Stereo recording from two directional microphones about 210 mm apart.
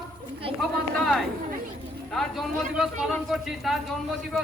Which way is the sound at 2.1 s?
Centre (ahead or behind).